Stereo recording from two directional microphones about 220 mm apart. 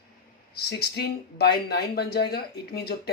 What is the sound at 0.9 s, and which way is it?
Speech, 50° left (ahead or behind).